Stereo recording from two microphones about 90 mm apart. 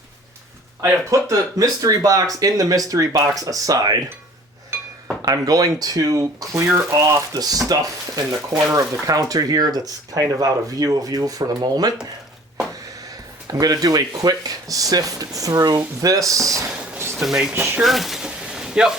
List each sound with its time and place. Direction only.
1.1 s speech: 40° right (ahead or behind)
5.2 s speech: 45° right (ahead or behind)
6.9 s speech: 45° right (ahead or behind)
17.2 s speech: 5° right (ahead or behind)
17.5 s speech: 20° right (ahead or behind)
17.8 s a sound: centre (ahead or behind)